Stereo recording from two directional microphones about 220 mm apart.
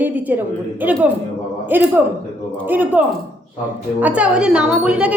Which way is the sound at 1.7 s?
10° right (ahead or behind).